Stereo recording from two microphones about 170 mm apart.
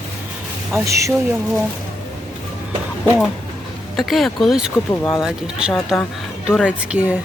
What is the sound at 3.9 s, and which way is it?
Speech, centre (ahead or behind).